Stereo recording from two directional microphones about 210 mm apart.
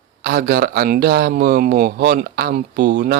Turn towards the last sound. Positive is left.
turn(degrees=-55)  # may be behind; listen again after turning